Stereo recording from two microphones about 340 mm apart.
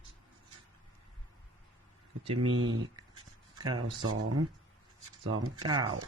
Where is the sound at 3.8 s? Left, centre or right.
Right.